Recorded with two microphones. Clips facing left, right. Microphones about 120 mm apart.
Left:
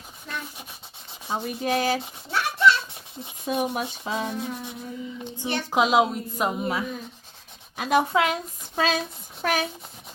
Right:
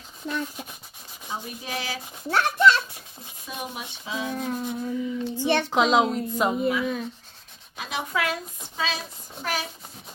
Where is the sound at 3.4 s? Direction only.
55° left (ahead or behind).